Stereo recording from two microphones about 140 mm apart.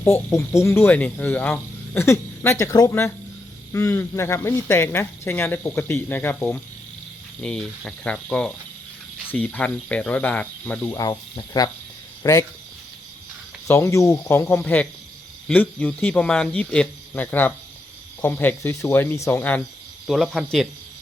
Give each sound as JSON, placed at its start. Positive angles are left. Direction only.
{"t": 0.0, "sound": "speech", "side_deg": 20}
{"t": 10.8, "sound": "speech", "side_deg": 25}
{"t": 13.7, "sound": "speech", "side_deg": 20}
{"t": 20.1, "sound": "speech", "side_deg": 0}